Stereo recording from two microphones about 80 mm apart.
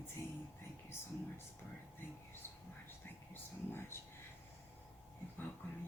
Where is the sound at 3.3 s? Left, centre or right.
Left.